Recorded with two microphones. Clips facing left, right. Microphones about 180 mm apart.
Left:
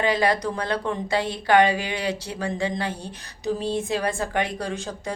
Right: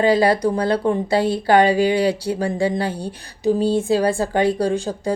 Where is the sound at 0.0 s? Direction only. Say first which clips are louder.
Right 6 dB; 35° right (ahead or behind).